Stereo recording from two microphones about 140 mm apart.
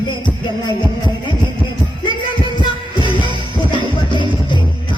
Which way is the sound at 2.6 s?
35° left (ahead or behind).